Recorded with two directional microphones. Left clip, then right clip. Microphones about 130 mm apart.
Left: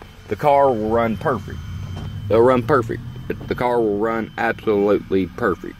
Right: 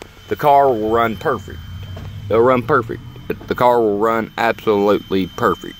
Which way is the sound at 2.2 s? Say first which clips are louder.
Right 1 dB; 35° right (ahead or behind).